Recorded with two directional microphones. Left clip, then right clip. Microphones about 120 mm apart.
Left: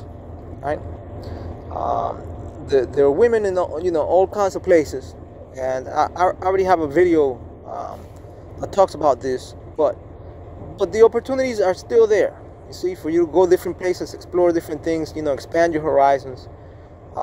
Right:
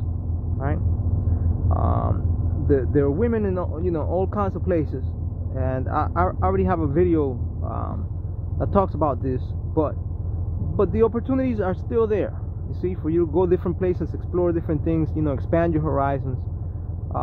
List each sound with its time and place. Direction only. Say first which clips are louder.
2.7 s a man's voice: left 5 dB; 30° left (ahead or behind); by 7.3 s 10° left (ahead or behind)
8.6 s a man's voice: left 5 dB; 15° left (ahead or behind)
15.1 s speech: left 4 dB; centre (ahead or behind)
15.5 s a man's voice: left 5 dB; 15° left (ahead or behind)